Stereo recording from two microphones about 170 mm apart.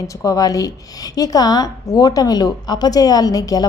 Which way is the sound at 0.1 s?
20° left (ahead or behind).